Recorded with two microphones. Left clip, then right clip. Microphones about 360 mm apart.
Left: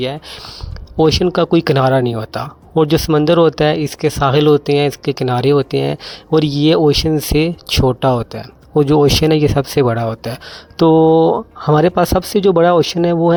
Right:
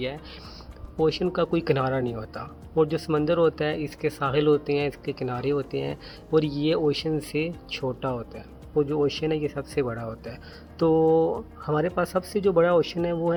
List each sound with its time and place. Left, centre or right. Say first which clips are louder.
0.0 s speech: left 11 dB; left